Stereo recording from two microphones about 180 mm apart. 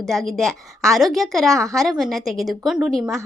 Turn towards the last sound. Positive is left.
turn(degrees=0)  # may be behind; listen again after turning